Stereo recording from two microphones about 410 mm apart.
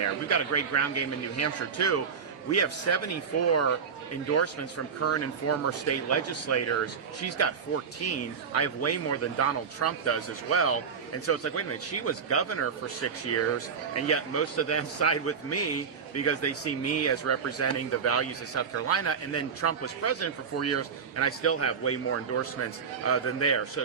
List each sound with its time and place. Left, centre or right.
0.0 s speech: left
5.0 s speech: left